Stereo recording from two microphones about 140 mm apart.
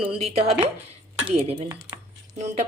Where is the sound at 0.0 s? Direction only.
45° right (ahead or behind).